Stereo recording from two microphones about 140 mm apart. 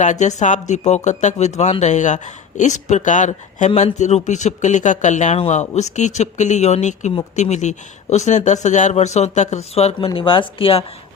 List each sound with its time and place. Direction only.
0.0 s speech: 60° left (ahead or behind)
10.2 s speech: 35° left (ahead or behind)